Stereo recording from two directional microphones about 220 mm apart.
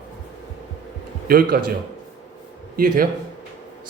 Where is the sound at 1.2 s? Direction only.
45° right (ahead or behind).